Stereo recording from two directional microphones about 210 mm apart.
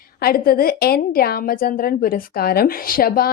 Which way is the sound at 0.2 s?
45° left (ahead or behind).